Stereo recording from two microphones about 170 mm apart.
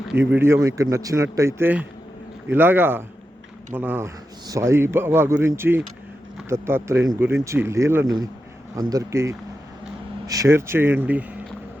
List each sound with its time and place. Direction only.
0.1 s a man's voice: 10° right (ahead or behind)